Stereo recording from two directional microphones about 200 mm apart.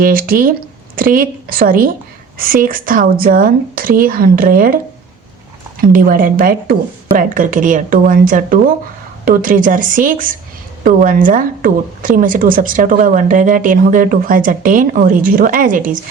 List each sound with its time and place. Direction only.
0.0 s a woman's voice: 45° right (ahead or behind)
5.9 s a woman's voice: 45° right (ahead or behind)